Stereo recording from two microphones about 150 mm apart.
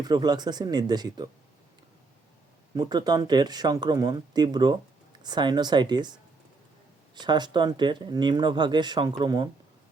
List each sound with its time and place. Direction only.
0.0 s speech: 30° right (ahead or behind)
2.7 s speech: 30° right (ahead or behind)
7.2 s speech: 30° right (ahead or behind)